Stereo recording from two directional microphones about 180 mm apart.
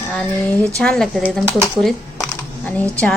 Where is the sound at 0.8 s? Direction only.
5° left (ahead or behind).